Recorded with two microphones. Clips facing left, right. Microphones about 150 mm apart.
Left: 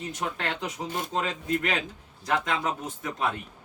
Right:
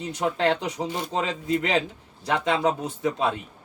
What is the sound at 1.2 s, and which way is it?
Speech, 25° right (ahead or behind).